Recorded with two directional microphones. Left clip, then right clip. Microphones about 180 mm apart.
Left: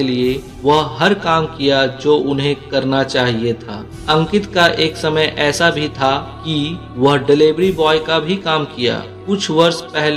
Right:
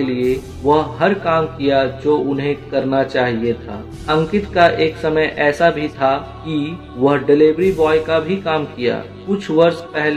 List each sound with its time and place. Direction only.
0.0 s speech: 35° left (ahead or behind)